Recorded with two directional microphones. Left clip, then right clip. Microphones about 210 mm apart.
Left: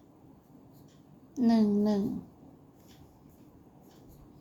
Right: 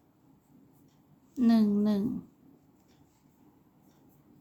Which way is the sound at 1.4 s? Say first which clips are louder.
Even; 25° right (ahead or behind).